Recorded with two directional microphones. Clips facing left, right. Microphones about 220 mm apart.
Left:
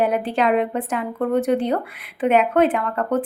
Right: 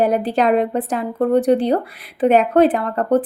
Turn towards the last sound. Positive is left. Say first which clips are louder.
# right 4 dB
turn(degrees=-35)  # may be behind; listen again after turning